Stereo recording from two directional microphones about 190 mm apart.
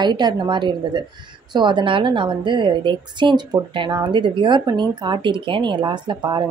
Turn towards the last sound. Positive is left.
turn(degrees=-25)  # may be behind; listen again after turning